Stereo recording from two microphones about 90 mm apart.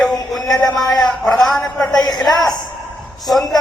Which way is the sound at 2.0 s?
45° left (ahead or behind).